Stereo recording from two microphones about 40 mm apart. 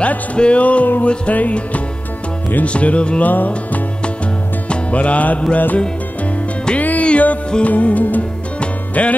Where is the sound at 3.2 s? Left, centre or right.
Left.